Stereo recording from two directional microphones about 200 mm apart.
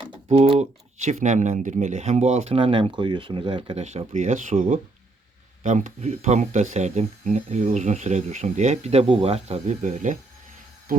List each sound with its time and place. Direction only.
0.3 s speech: 30° right (ahead or behind)